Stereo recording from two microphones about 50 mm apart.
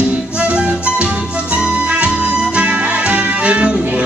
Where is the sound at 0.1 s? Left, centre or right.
Right.